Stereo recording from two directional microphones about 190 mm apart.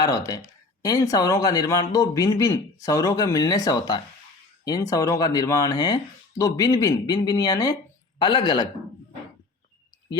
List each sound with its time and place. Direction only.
0.0 s speech: 15° left (ahead or behind)